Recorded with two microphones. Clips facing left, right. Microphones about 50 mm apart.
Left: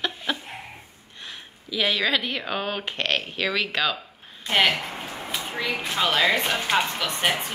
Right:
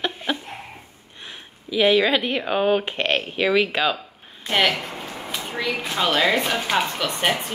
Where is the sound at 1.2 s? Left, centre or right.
Centre.